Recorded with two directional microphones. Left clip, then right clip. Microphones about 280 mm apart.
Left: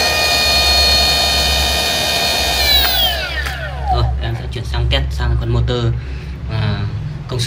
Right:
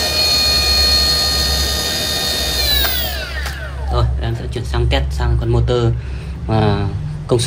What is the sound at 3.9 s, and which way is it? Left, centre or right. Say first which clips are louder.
Music: left 3 dB; centre.